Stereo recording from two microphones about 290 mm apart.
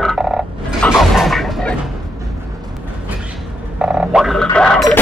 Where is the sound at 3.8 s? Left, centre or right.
Centre.